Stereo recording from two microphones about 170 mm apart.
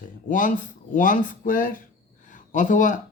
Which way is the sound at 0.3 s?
50° left (ahead or behind).